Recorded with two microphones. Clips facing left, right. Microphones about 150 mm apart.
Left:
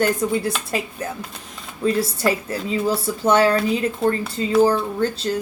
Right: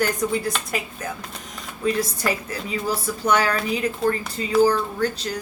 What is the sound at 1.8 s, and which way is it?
Speech, 30° left (ahead or behind).